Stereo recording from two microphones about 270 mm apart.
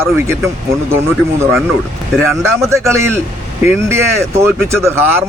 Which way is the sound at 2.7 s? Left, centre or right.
Centre.